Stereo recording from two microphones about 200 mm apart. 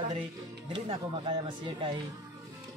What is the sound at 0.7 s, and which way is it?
Speech, 25° right (ahead or behind).